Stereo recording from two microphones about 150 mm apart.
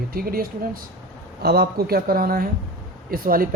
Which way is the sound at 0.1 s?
80° right.